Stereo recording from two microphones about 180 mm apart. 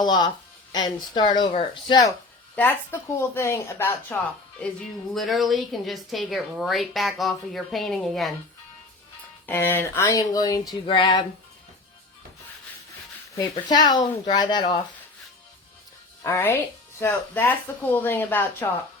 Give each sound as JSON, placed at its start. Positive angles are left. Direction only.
{"t": 0.0, "sound": "speech", "side_deg": 25}
{"t": 2.6, "sound": "speech", "side_deg": 10}
{"t": 5.1, "sound": "a woman's voice", "side_deg": 0}
{"t": 9.5, "sound": "speech", "side_deg": 10}
{"t": 13.3, "sound": "speech", "side_deg": 20}
{"t": 16.2, "sound": "speech", "side_deg": 15}